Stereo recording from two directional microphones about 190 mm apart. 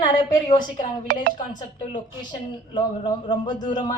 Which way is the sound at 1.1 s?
55° right (ahead or behind).